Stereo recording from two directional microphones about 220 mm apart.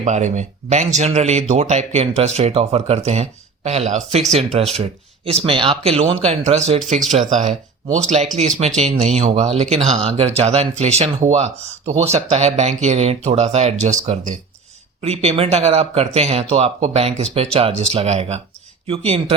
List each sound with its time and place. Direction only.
0.0 s speech: 35° right (ahead or behind)